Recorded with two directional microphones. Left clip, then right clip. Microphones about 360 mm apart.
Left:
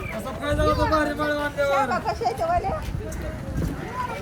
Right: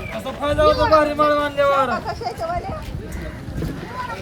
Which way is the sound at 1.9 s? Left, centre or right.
Left.